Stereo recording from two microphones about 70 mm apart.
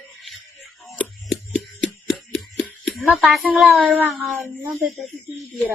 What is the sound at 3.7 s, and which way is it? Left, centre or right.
Child singing, right.